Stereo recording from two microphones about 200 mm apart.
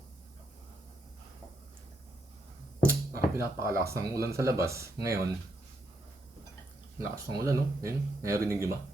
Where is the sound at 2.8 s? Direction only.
15° right (ahead or behind).